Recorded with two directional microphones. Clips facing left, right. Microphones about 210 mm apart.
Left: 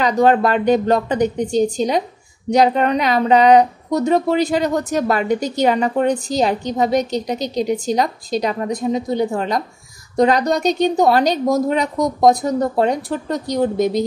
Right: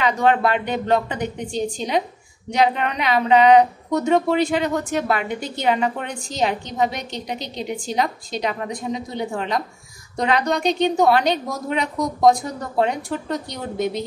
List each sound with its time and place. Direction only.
0.0 s speech: 40° left (ahead or behind)